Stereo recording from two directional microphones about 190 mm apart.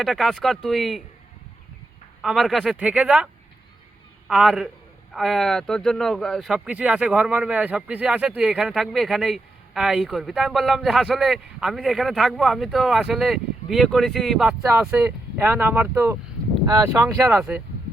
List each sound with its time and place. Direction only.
0.0 s speech: centre (ahead or behind)
2.2 s speech: centre (ahead or behind)
4.3 s speech: centre (ahead or behind)